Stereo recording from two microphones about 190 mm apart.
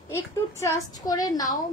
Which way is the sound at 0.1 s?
15° left (ahead or behind).